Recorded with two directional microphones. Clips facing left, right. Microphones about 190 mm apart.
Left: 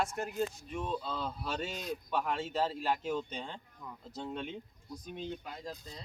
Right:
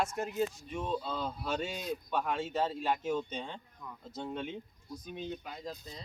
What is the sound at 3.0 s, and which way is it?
Speech, centre (ahead or behind).